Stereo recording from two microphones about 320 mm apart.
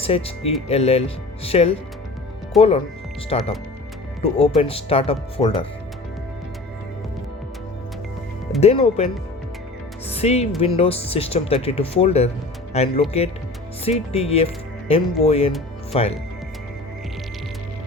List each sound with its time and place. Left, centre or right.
0.0 s speech: centre
8.6 s speech: centre
10.1 s speech: centre